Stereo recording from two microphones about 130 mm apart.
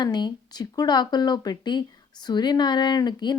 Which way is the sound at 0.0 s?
35° left (ahead or behind).